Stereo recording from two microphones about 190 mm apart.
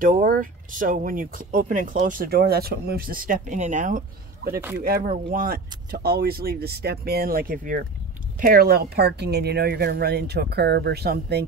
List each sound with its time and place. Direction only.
0.0 s speech: 45° right (ahead or behind)